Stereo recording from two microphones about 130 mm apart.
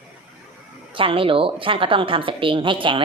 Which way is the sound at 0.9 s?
45° right (ahead or behind).